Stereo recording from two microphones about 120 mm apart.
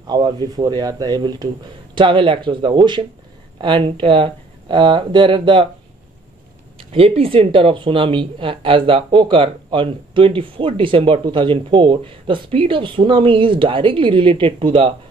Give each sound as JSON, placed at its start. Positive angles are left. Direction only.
{"t": 0.0, "sound": "speech", "side_deg": -35}
{"t": 6.8, "sound": "speech", "side_deg": -50}